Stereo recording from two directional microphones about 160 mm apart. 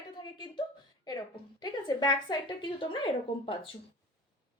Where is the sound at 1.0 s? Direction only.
25° left (ahead or behind).